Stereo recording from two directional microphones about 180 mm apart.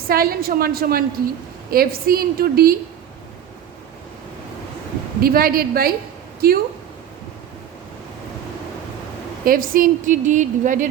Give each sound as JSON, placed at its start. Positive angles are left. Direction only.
{"t": 0.1, "sound": "a woman's voice", "side_deg": -55}
{"t": 5.2, "sound": "a woman's voice", "side_deg": -55}
{"t": 9.4, "sound": "speech", "side_deg": -50}